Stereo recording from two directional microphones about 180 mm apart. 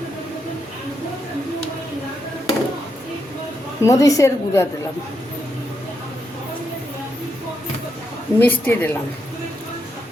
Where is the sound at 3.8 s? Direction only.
20° left (ahead or behind).